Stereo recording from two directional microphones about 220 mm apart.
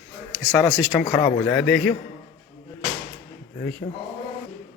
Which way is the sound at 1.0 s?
5° left (ahead or behind).